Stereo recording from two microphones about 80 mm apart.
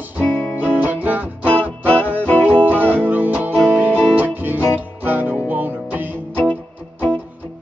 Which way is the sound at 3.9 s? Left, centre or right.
Centre.